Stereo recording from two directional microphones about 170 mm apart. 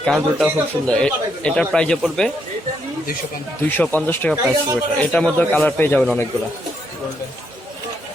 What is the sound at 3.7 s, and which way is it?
Speech, 10° left (ahead or behind).